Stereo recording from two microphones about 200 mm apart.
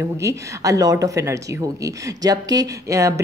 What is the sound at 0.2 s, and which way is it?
A woman's voice, 15° right (ahead or behind).